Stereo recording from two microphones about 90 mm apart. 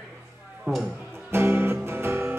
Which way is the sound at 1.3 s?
25° right (ahead or behind).